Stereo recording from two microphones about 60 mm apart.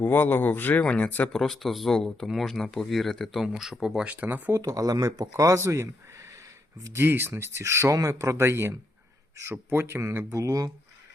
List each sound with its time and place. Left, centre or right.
0.0 s speech: left
1.3 s speech: centre
3.4 s speech: centre
4.0 s speech: right
4.6 s speech: right
5.5 s speech: right
6.9 s speech: right
10.2 s speech: right